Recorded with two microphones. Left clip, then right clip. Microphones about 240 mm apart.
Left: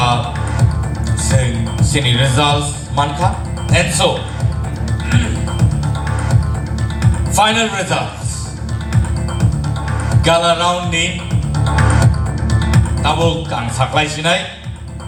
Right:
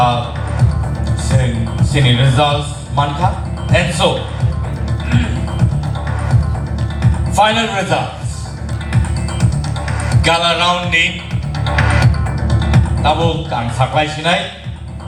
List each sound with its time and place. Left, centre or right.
1.9 s speech: left
7.0 s a man's voice: left
10.1 s speech: left
11.5 s music: left
12.5 s speech: left